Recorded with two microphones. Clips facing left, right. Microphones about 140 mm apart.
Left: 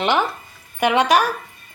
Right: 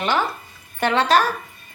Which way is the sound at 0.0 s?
20° left (ahead or behind).